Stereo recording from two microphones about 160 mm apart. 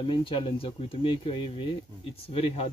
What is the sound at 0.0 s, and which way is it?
Speech, 35° left (ahead or behind).